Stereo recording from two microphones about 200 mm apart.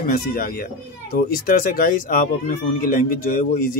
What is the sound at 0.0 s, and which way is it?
Speech, 45° left (ahead or behind).